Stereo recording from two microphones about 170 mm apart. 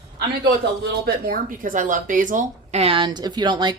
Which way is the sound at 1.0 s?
55° right (ahead or behind).